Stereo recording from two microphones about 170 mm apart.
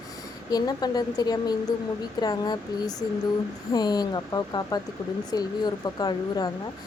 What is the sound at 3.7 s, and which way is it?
A woman's voice, 25° left (ahead or behind).